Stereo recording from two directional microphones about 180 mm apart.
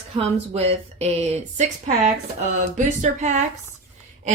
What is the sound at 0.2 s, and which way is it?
Speech, 35° right (ahead or behind).